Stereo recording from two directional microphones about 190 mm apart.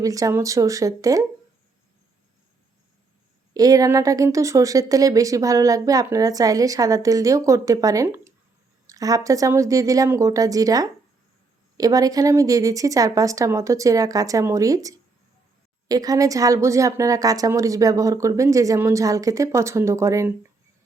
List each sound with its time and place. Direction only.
0.0 s speech: 20° right (ahead or behind)
3.5 s speech: 20° right (ahead or behind)